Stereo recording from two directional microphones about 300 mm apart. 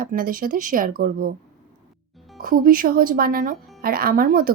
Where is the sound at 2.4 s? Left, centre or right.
Right.